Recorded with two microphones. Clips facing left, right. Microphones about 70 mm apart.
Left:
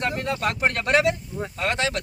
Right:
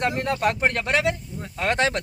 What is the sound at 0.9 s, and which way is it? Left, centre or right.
Speech, left.